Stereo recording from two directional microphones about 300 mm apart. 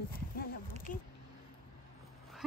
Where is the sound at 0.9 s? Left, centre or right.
Left.